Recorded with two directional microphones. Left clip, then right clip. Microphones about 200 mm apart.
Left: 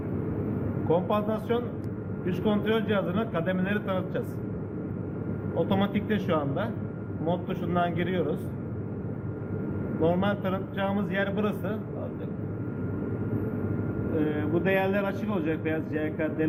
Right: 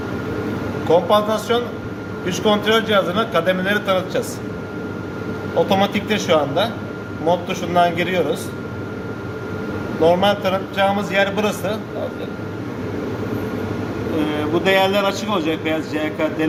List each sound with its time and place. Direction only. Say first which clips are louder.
0.9 s a man's voice: right 11 dB; 25° right (ahead or behind)
5.6 s a man's voice: right 10 dB; 25° right (ahead or behind)
10.0 s a man's voice: right 12 dB; 25° right (ahead or behind)
14.3 s a man's voice: right 12 dB; 15° right (ahead or behind)